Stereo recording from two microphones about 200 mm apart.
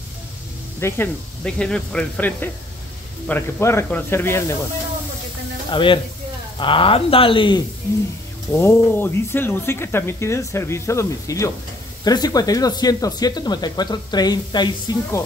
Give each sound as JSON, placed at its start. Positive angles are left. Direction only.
{"t": 0.7, "sound": "speech", "side_deg": 10}
{"t": 5.7, "sound": "speech", "side_deg": 25}
{"t": 8.5, "sound": "speech", "side_deg": 10}